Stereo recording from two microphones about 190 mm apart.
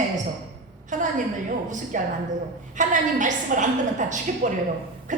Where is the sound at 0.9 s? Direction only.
40° right (ahead or behind).